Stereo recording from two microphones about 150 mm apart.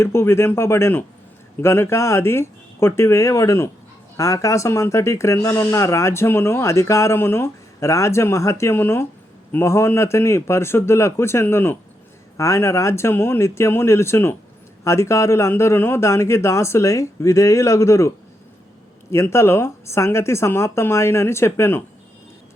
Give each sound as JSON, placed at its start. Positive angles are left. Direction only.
{"t": 0.0, "sound": "speech", "side_deg": 15}
{"t": 19.1, "sound": "speech", "side_deg": 20}